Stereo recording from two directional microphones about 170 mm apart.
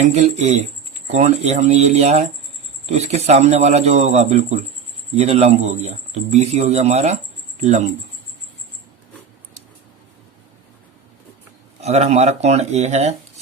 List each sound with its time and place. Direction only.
0.0 s speech: 40° right (ahead or behind)
11.8 s speech: 40° right (ahead or behind)